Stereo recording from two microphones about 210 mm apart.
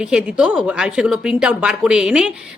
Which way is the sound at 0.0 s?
5° right (ahead or behind).